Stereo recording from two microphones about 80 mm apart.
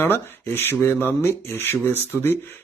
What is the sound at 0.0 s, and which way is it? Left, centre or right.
Speech, left.